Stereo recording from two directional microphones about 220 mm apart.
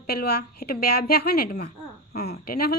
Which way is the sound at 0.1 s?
45° left (ahead or behind).